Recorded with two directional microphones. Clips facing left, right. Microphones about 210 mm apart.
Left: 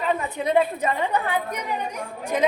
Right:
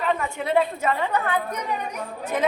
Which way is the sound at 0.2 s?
20° left (ahead or behind).